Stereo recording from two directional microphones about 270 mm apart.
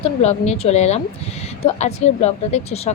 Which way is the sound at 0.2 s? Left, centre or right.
Left.